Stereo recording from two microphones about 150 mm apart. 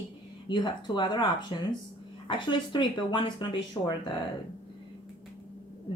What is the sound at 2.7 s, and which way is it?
A woman's voice, 30° left (ahead or behind).